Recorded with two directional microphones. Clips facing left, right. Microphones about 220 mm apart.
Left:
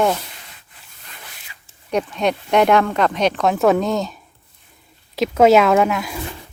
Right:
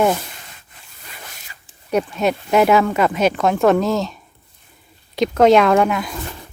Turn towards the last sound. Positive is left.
turn(degrees=0)  # may be behind; listen again after turning